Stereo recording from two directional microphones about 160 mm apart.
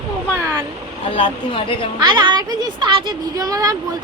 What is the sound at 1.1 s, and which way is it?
Speech, 35° left (ahead or behind).